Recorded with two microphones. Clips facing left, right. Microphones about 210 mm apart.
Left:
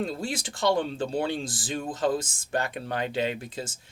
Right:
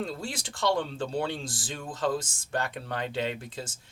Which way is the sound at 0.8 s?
20° left (ahead or behind).